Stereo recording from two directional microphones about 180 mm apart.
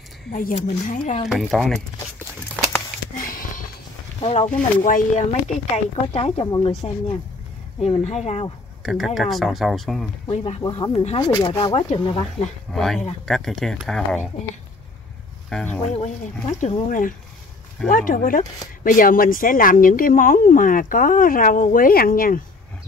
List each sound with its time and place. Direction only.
0.3 s speech: 45° left (ahead or behind)
1.3 s speech: 5° right (ahead or behind)
3.2 s sniff: 50° left (ahead or behind)
4.2 s speech: 30° left (ahead or behind)
4.5 s speech: 10° left (ahead or behind)
4.8 s speech: 45° left (ahead or behind)
6.1 s speech: 35° left (ahead or behind)
8.8 s speech: centre (ahead or behind)
10.3 s speech: 35° left (ahead or behind)
12.7 s speech: centre (ahead or behind)
15.5 s speech: 5° left (ahead or behind)
16.4 s speech: 40° left (ahead or behind)